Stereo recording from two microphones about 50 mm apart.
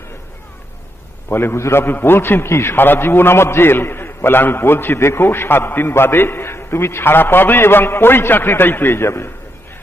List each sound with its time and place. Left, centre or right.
1.3 s a man's voice: left
2.7 s a man's voice: left